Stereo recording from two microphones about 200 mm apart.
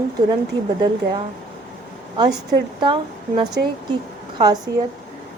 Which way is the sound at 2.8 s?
25° right (ahead or behind).